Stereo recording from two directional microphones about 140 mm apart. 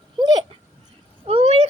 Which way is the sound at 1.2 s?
45° right (ahead or behind).